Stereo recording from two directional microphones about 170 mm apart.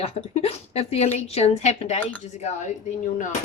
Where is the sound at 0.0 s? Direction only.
35° left (ahead or behind).